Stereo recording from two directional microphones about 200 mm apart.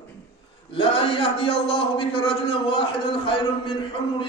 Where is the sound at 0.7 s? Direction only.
25° left (ahead or behind).